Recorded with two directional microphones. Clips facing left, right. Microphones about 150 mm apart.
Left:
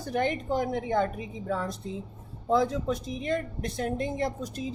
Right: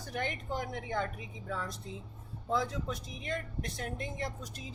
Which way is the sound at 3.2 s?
30° left (ahead or behind).